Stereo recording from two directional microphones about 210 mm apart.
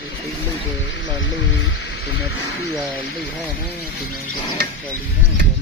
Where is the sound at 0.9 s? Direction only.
60° left (ahead or behind).